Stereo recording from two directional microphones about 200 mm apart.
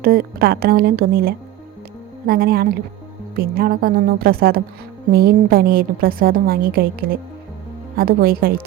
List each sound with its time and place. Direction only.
0.0 s a woman's voice: 45° right (ahead or behind)